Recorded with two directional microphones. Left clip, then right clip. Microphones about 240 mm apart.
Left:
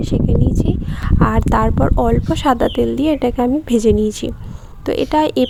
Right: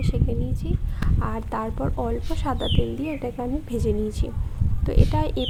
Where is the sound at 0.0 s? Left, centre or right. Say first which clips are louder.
Left 11 dB; left.